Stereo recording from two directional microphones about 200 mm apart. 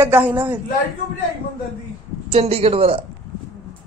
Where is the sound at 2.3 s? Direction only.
30° right (ahead or behind).